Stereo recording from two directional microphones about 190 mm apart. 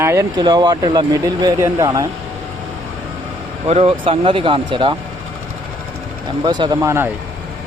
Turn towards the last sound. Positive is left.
turn(degrees=-15)  # may be behind; listen again after turning